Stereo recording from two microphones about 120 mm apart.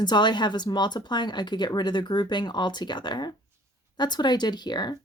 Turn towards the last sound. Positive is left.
turn(degrees=35)  # may be behind; listen again after turning